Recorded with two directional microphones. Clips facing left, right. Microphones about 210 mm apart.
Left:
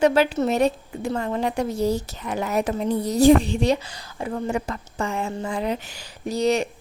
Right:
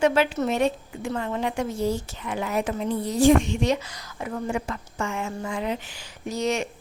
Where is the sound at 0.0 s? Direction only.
35° left (ahead or behind).